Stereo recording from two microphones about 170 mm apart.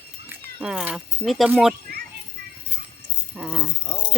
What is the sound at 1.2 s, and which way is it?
Speech, centre (ahead or behind).